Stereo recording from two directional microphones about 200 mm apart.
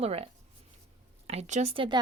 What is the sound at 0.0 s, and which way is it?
Speech, 30° right (ahead or behind).